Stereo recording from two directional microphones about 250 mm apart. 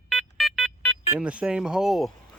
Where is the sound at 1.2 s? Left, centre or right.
Centre.